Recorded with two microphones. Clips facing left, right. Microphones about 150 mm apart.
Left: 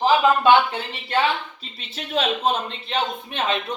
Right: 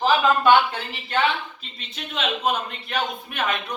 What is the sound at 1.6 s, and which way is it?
A man's voice, 35° left (ahead or behind).